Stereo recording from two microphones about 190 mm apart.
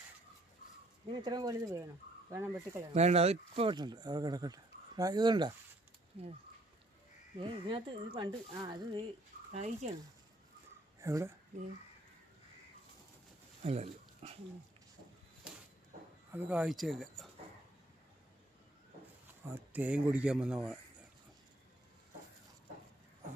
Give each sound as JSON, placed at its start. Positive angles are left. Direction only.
{"t": 1.1, "sound": "speech", "side_deg": -20}
{"t": 2.9, "sound": "speech", "side_deg": -35}
{"t": 6.1, "sound": "speech", "side_deg": -35}
{"t": 7.4, "sound": "speech", "side_deg": -25}
{"t": 9.5, "sound": "speech", "side_deg": -35}
{"t": 11.0, "sound": "speech", "side_deg": -15}
{"t": 13.6, "sound": "speech", "side_deg": -35}
{"t": 16.3, "sound": "speech", "side_deg": -5}
{"t": 19.3, "sound": "speech", "side_deg": -10}